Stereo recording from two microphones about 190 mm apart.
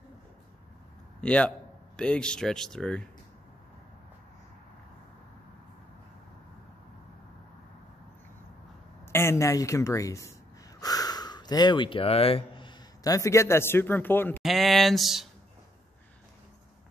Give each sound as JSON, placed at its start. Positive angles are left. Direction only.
{"t": 1.2, "sound": "a man's voice", "side_deg": 5}
{"t": 9.0, "sound": "speech", "side_deg": 15}
{"t": 14.4, "sound": "speech", "side_deg": 0}